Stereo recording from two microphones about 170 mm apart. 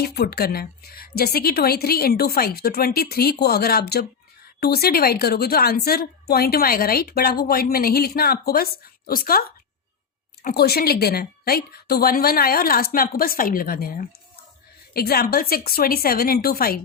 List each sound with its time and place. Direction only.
0.0 s a woman's voice: 70° left (ahead or behind)
10.4 s a woman's voice: 65° left (ahead or behind)